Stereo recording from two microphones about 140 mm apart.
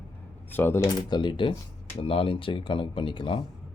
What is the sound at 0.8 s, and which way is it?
Speech, 35° left (ahead or behind).